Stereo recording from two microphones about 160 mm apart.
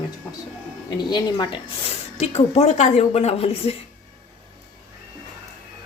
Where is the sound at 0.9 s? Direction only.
25° left (ahead or behind).